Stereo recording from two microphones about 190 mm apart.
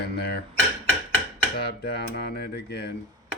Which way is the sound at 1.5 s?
55° left (ahead or behind).